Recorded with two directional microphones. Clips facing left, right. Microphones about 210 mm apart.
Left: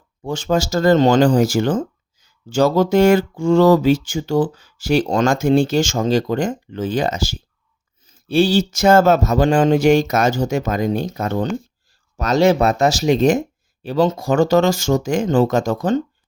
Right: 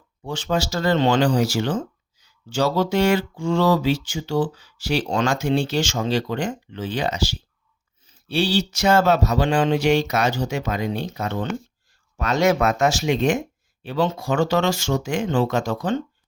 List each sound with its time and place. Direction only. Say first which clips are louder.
0.2 s speech: left 5 dB; 45° left (ahead or behind)